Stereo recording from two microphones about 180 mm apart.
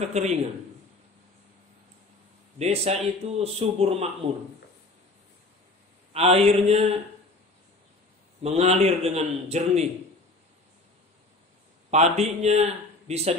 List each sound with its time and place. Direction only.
0.0 s speech: 40° right (ahead or behind)
2.6 s speech: 35° right (ahead or behind)
6.1 s speech: 35° right (ahead or behind)
8.4 s speech: 35° right (ahead or behind)
11.9 s speech: 40° right (ahead or behind)